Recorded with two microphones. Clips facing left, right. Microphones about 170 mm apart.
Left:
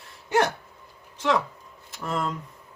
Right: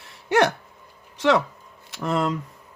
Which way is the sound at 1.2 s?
80° right.